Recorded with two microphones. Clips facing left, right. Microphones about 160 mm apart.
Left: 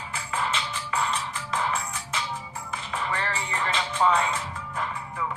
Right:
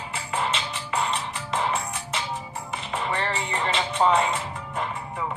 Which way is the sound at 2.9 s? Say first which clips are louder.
Right 3 dB; 25° right (ahead or behind).